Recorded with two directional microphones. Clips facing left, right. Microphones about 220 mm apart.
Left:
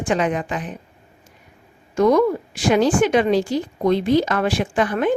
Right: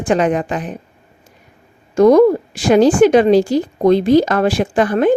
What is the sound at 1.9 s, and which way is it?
A woman's voice, 35° right (ahead or behind).